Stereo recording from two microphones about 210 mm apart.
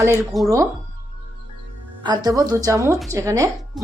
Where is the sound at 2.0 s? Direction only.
20° right (ahead or behind).